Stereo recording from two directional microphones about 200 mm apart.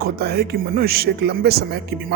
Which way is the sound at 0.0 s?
55° right (ahead or behind).